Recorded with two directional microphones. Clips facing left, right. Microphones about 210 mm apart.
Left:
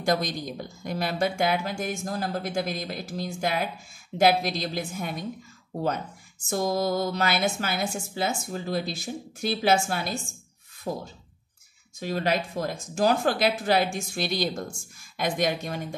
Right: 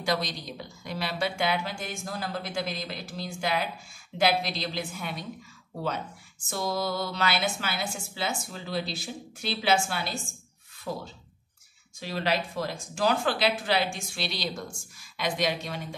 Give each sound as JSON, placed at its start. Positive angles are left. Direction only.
{"t": 0.0, "sound": "a woman's voice", "side_deg": 50}
{"t": 6.5, "sound": "a woman's voice", "side_deg": 45}